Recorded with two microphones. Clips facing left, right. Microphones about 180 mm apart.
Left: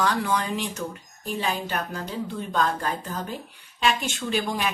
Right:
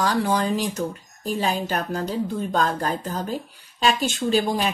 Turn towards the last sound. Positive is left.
turn(degrees=-30)  # may be behind; listen again after turning